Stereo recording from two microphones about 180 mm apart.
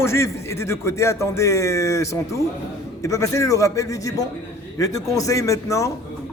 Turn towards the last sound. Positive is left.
turn(degrees=15)  # may be behind; listen again after turning